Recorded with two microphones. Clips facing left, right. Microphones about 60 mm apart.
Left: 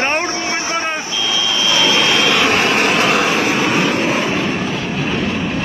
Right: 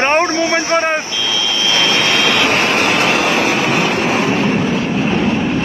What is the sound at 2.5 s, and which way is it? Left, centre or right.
Vehicle, right.